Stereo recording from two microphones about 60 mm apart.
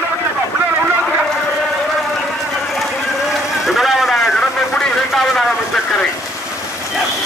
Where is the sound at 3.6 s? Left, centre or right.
Centre.